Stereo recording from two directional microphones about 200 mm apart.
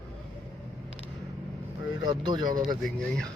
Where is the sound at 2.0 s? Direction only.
20° right (ahead or behind).